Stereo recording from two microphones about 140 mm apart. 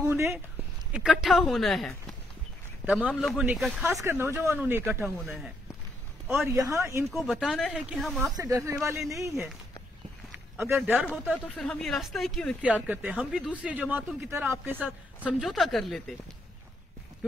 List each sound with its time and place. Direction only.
0.0 s a sound: 15° right (ahead or behind)
0.9 s speech: 5° right (ahead or behind)
3.8 s speech: 15° right (ahead or behind)
6.4 s speech: 25° right (ahead or behind)
7.1 s speech: centre (ahead or behind)
8.3 s speech: 25° right (ahead or behind)
10.6 s speech: 15° right (ahead or behind)
11.2 s speech: 5° left (ahead or behind)
12.6 s a man's voice: 10° right (ahead or behind)
15.2 s speech: centre (ahead or behind)